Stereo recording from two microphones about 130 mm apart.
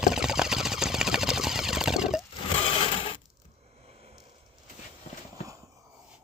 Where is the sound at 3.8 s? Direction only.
50° right (ahead or behind).